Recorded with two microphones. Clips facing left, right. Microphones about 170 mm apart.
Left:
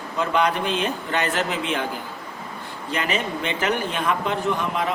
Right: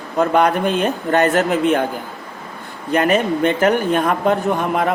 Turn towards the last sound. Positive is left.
turn(degrees=-55)  # may be behind; listen again after turning